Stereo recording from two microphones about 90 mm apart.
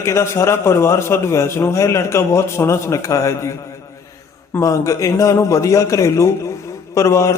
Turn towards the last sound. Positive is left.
turn(degrees=35)  # may be behind; listen again after turning